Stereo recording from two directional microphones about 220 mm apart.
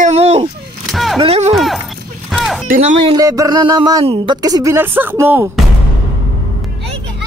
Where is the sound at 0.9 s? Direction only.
Centre (ahead or behind).